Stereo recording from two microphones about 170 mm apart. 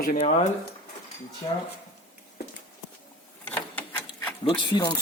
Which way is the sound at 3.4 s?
10° left (ahead or behind).